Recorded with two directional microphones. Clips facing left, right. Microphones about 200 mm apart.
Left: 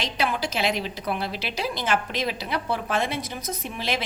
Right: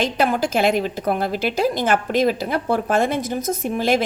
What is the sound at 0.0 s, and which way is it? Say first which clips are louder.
A woman's voice: right 7 dB; 50° right (ahead or behind).